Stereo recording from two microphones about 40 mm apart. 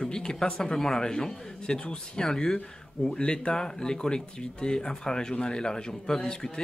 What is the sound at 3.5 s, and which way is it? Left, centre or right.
A man's voice, centre.